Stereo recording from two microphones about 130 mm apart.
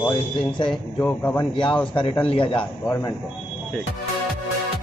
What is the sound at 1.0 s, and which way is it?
Speech, 15° left (ahead or behind).